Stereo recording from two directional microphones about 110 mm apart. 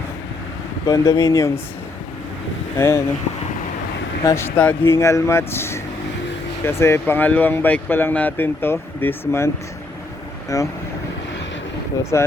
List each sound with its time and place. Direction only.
0.9 s speech: 25° left (ahead or behind)
2.7 s speech: 25° left (ahead or behind)
4.2 s speech: 30° left (ahead or behind)
4.4 s speech: 15° left (ahead or behind)
10.5 s speech: 30° left (ahead or behind)